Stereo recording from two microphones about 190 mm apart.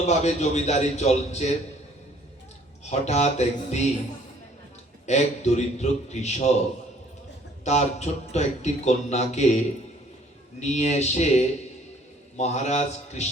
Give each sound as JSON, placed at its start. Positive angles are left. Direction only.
{"t": 0.0, "sound": "a man's voice", "side_deg": 35}
{"t": 2.9, "sound": "a man's voice", "side_deg": 35}
{"t": 5.0, "sound": "a man's voice", "side_deg": 35}
{"t": 7.6, "sound": "a man's voice", "side_deg": 35}